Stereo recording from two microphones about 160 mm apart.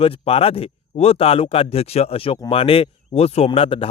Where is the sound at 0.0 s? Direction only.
35° left (ahead or behind).